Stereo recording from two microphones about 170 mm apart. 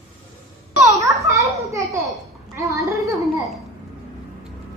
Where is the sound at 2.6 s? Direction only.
20° right (ahead or behind).